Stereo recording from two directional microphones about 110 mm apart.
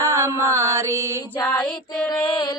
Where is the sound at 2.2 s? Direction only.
45° left (ahead or behind).